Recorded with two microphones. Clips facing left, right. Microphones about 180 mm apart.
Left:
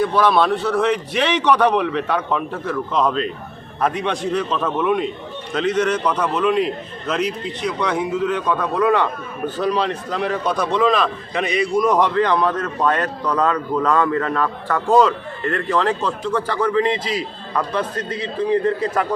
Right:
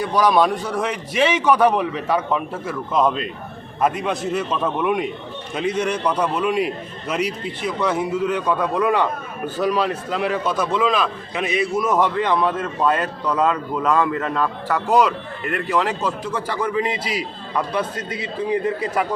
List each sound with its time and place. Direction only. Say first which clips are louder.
0.0 s a man's voice: left 1 dB; 10° right (ahead or behind)